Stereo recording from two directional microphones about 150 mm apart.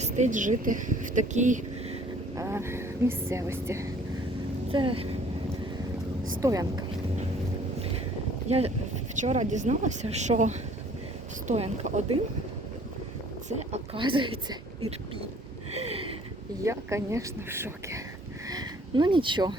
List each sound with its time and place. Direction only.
0.0 s speech: 55° right (ahead or behind)
2.3 s speech: 20° right (ahead or behind)
4.7 s speech: 35° right (ahead or behind)
6.4 s speech: 25° right (ahead or behind)
8.4 s speech: 45° right (ahead or behind)
13.5 s speech: 45° right (ahead or behind)
14.0 s a woman's voice: 35° right (ahead or behind)
15.7 s a sound: 45° right (ahead or behind)
16.6 s speech: 20° right (ahead or behind)
18.4 s a sound: 25° right (ahead or behind)